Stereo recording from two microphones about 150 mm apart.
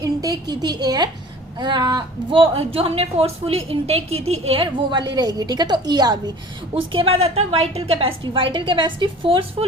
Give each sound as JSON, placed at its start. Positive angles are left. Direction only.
{"t": 0.0, "sound": "a woman's voice", "side_deg": -25}
{"t": 6.9, "sound": "a woman's voice", "side_deg": -40}